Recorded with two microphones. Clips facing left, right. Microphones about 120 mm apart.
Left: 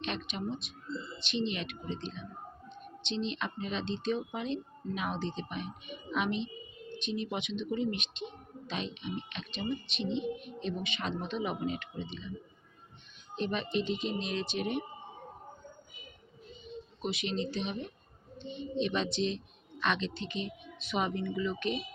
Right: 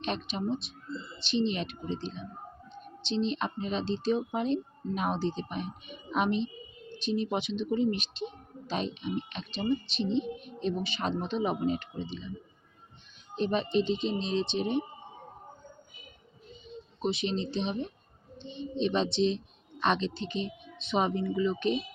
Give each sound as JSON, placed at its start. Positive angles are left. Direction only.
{"t": 0.0, "sound": "a woman's voice", "side_deg": -35}
{"t": 13.3, "sound": "a woman's voice", "side_deg": -35}
{"t": 17.0, "sound": "a woman's voice", "side_deg": -30}